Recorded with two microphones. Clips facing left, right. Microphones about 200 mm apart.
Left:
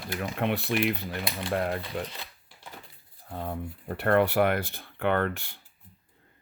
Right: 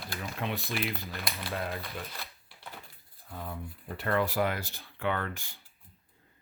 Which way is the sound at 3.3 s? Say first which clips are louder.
Left 6 dB; 60° left (ahead or behind).